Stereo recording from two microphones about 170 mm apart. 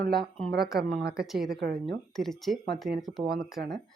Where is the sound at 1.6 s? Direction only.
65° right (ahead or behind).